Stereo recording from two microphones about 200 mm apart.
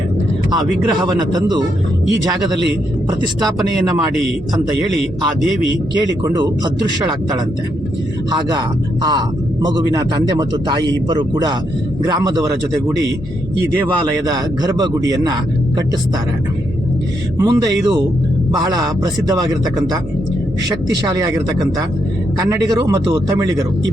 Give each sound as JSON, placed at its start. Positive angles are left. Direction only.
{"t": 1.0, "sound": "a man's voice", "side_deg": -20}
{"t": 6.2, "sound": "a man's voice", "side_deg": -20}
{"t": 8.3, "sound": "a man's voice", "side_deg": -20}
{"t": 14.3, "sound": "a man's voice", "side_deg": -20}
{"t": 17.3, "sound": "a man's voice", "side_deg": -15}